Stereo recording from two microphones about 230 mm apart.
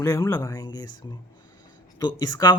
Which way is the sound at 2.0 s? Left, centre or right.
Centre.